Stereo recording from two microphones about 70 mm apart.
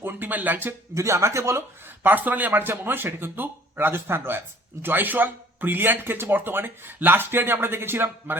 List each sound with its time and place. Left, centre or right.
0.0 s speech: right
0.9 s speech: right
2.0 s a man's voice: right